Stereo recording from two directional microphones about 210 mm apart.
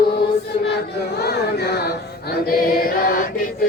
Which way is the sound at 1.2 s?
50° left (ahead or behind).